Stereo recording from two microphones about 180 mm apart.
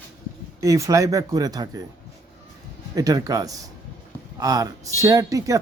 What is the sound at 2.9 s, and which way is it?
Speech, 20° right (ahead or behind).